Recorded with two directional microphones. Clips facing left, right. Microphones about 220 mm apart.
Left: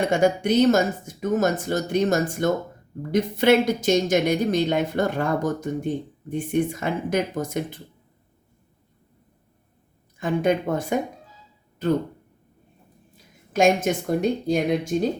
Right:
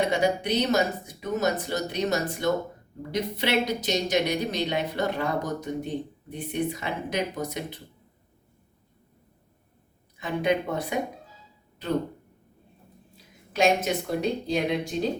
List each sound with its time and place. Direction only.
0.0 s speech: 50° left (ahead or behind)
10.2 s speech: 50° left (ahead or behind)
13.5 s speech: 50° left (ahead or behind)